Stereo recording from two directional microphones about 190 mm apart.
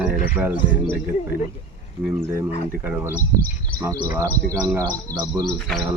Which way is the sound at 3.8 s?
15° right (ahead or behind).